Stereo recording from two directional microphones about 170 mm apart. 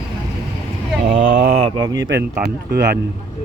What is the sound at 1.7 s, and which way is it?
Speech, 20° right (ahead or behind).